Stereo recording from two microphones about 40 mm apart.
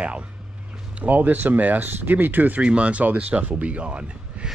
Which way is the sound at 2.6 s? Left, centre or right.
Right.